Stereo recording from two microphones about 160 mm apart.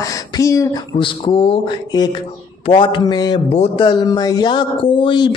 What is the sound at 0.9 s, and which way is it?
A man's voice, 35° left (ahead or behind).